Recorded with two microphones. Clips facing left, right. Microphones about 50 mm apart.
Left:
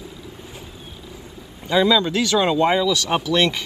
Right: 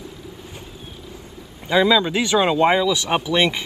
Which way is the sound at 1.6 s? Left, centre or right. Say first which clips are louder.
Right 1 dB; centre.